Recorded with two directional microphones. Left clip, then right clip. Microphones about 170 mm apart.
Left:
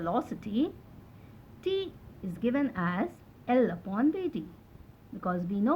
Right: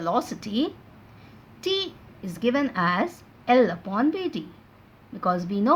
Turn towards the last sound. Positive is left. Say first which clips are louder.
# right 8 dB
turn(degrees=-40)  # may be behind; listen again after turning